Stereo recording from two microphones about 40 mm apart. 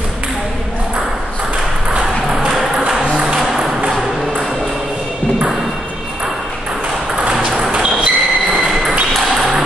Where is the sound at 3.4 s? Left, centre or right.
Centre.